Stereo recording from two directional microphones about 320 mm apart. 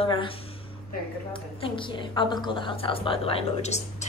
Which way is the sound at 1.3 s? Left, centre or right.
Centre.